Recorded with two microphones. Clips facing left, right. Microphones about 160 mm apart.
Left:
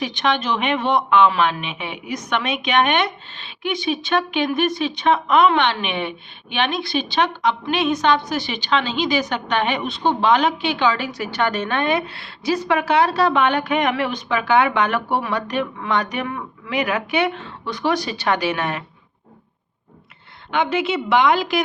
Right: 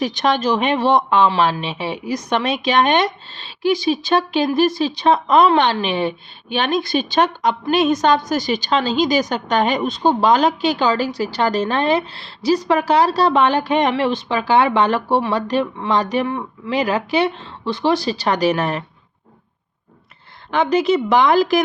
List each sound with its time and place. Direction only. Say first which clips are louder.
0.0 s a man's voice: right 4 dB; 40° right (ahead or behind)
20.5 s a man's voice: right 5 dB; 40° right (ahead or behind)